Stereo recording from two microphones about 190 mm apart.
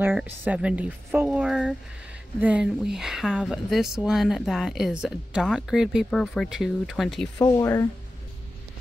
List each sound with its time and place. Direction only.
0.0 s speech: 10° right (ahead or behind)
7.3 s speech: 15° left (ahead or behind)